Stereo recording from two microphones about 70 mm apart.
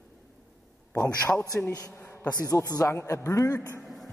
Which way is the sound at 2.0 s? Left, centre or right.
Left.